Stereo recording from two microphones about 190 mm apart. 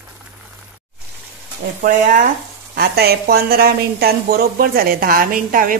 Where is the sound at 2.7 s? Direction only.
55° right (ahead or behind).